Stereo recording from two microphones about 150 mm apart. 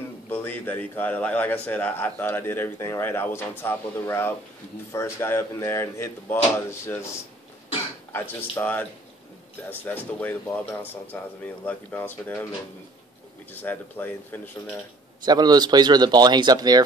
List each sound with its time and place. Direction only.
0.3 s a man's voice: 10° left (ahead or behind)
8.1 s a man's voice: 15° left (ahead or behind)
13.5 s a man's voice: 15° left (ahead or behind)
15.2 s speech: 25° right (ahead or behind)